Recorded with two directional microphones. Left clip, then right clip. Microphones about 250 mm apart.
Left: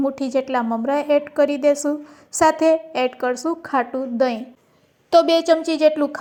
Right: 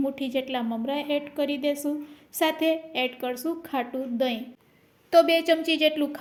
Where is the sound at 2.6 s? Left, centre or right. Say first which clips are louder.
Left 8 dB; centre.